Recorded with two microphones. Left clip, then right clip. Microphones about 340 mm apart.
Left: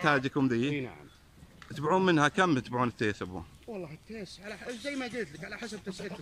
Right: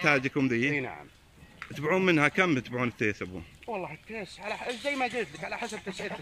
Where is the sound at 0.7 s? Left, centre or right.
Right.